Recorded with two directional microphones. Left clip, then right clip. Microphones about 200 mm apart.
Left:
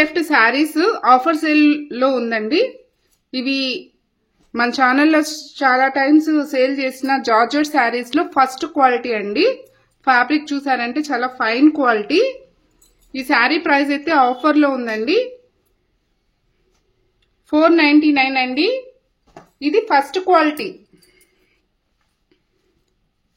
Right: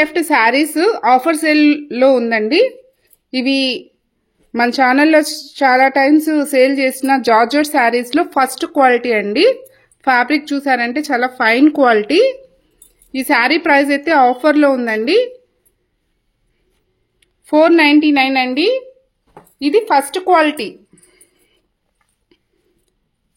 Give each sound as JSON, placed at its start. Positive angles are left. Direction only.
{"t": 0.0, "sound": "a woman's voice", "side_deg": -30}
{"t": 17.2, "sound": "a woman's voice", "side_deg": -35}
{"t": 19.6, "sound": "a sound", "side_deg": -45}